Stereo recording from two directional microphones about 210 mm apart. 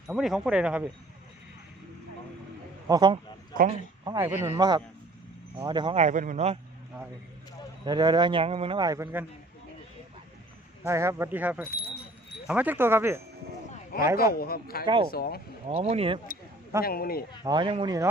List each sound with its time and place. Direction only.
0.1 s speech: centre (ahead or behind)
2.8 s a man's voice: 20° right (ahead or behind)
3.5 s speech: 40° right (ahead or behind)
4.0 s a man's voice: 15° right (ahead or behind); by 6.6 s 30° right (ahead or behind)
7.9 s a man's voice: 20° right (ahead or behind)
10.8 s speech: 10° right (ahead or behind)
14.3 s speech: 45° left (ahead or behind)
15.6 s a man's voice: 30° right (ahead or behind)
16.8 s speech: 45° left (ahead or behind)
17.4 s a man's voice: 20° right (ahead or behind)